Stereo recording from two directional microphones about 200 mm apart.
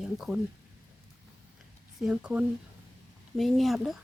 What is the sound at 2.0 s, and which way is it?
Speech, 5° right (ahead or behind).